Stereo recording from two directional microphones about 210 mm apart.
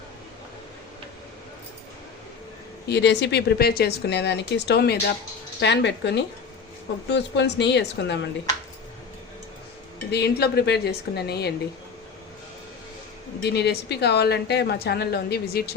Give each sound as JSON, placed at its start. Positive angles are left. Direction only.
{"t": 2.9, "sound": "a woman's voice", "side_deg": 55}
{"t": 10.1, "sound": "a woman's voice", "side_deg": 50}
{"t": 13.4, "sound": "a woman's voice", "side_deg": 50}